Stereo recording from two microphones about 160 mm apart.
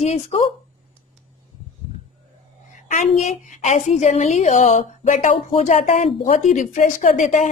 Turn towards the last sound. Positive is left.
turn(degrees=50)  # may be behind; listen again after turning